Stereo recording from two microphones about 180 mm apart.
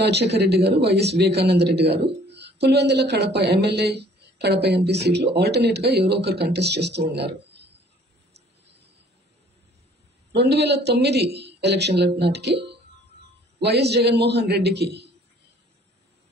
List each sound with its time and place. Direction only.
0.0 s speech: 65° right (ahead or behind)
10.3 s a man's voice: 70° right (ahead or behind)